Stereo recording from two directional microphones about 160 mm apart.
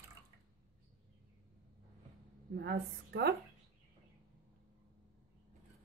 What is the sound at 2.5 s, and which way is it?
Speech, 90° right.